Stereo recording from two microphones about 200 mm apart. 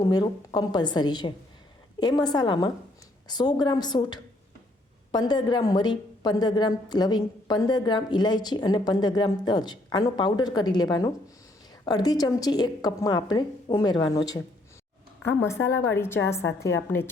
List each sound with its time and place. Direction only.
0.0 s a woman's voice: 20° left (ahead or behind)
15.4 s a woman's voice: 15° left (ahead or behind)